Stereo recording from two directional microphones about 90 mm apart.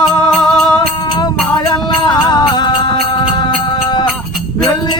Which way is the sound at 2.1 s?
55° left (ahead or behind).